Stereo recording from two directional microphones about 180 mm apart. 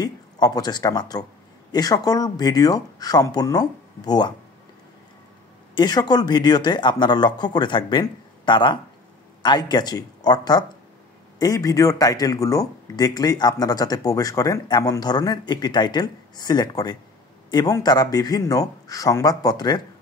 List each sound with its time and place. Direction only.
0.0 s a man's voice: 20° left (ahead or behind)
5.8 s a man's voice: 25° left (ahead or behind)